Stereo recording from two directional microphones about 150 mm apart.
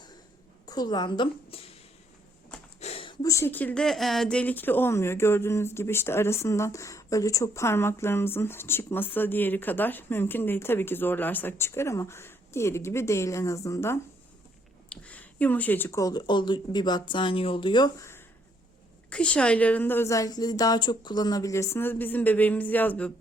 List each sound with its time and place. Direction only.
0.6 s a woman's voice: 25° left (ahead or behind)
2.8 s speech: 40° left (ahead or behind); by 14.0 s 20° left (ahead or behind)
14.8 s speech: 10° left (ahead or behind)
19.1 s speech: 5° left (ahead or behind)